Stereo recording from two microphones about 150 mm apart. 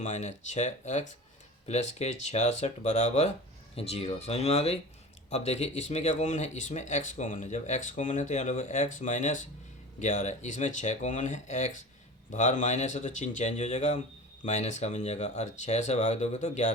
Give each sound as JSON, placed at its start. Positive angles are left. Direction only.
{"t": 0.0, "sound": "speech", "side_deg": 50}